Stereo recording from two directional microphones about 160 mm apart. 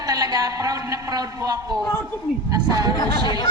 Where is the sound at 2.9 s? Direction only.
25° left (ahead or behind).